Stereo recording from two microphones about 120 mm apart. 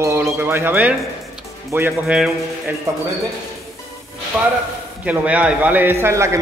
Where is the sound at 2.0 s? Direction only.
5° right (ahead or behind).